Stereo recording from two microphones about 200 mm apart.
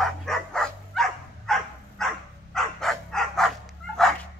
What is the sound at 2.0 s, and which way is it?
Dog, centre (ahead or behind).